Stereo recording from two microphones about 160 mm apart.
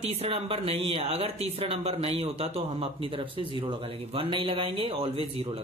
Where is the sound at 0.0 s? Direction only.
40° right (ahead or behind).